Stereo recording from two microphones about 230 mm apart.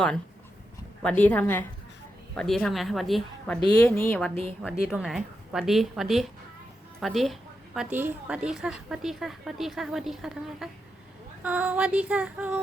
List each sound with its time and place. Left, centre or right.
1.0 s a woman's voice: centre
4.6 s a woman's voice: centre